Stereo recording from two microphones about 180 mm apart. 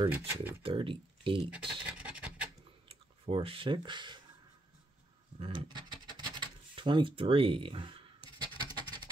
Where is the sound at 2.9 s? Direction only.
30° right (ahead or behind).